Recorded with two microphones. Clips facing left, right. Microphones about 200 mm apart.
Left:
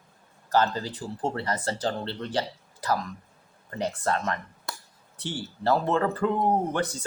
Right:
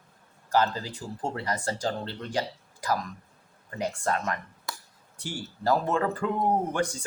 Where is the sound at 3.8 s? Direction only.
10° right (ahead or behind).